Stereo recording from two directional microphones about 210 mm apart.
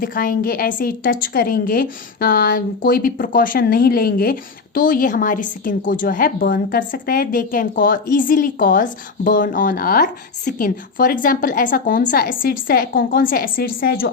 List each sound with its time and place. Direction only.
0.0 s a woman's voice: 40° left (ahead or behind)